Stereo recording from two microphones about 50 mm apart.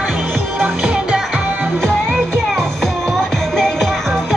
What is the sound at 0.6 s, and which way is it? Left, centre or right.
Music, centre.